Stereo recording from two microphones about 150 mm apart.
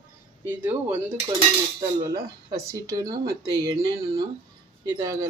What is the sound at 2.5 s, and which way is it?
Speech, 25° right (ahead or behind).